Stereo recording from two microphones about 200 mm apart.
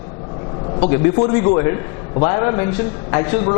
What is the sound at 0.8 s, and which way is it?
Speech, 25° left (ahead or behind).